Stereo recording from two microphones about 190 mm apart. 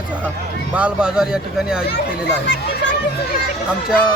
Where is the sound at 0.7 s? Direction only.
5° right (ahead or behind).